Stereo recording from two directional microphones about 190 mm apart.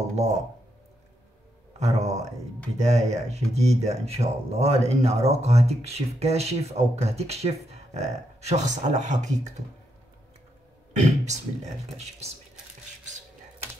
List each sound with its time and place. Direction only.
0.1 s speech: 35° right (ahead or behind)
1.8 s speech: 35° right (ahead or behind)
10.9 s speech: 40° right (ahead or behind)